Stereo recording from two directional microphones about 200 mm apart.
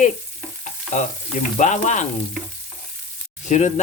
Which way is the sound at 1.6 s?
35° left (ahead or behind).